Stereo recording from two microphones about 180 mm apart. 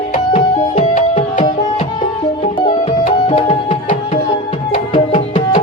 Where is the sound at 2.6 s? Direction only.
25° left (ahead or behind).